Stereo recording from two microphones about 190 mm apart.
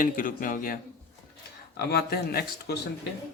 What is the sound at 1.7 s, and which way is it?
Speech, 55° left (ahead or behind).